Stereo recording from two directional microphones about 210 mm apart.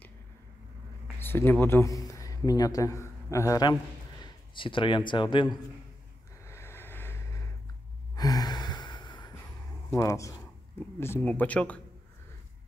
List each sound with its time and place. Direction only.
1.2 s a man's voice: 10° left (ahead or behind)
6.4 s vehicle: 10° left (ahead or behind)
8.2 s gasp: 20° left (ahead or behind)
9.9 s speech: 15° left (ahead or behind)